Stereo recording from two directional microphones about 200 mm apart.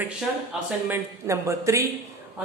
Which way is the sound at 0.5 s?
5° right (ahead or behind).